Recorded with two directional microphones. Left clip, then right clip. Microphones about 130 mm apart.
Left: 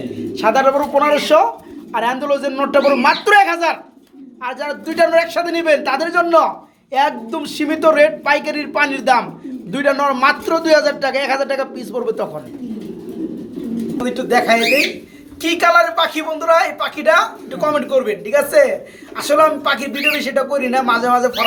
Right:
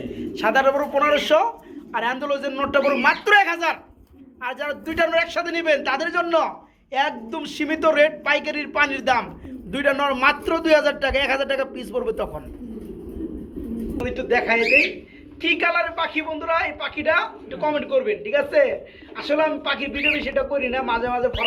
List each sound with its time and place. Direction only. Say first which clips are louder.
0.2 s a man's voice: left 5 dB; centre (ahead or behind)
9.7 s a man's voice: left 5 dB; 15° right (ahead or behind)
14.0 s a man's voice: left 6 dB; centre (ahead or behind)